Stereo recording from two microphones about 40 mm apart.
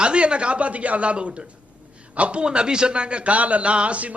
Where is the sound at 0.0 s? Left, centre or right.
Right.